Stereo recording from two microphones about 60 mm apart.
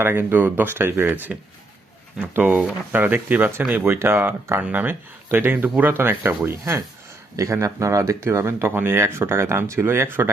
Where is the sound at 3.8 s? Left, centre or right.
Right.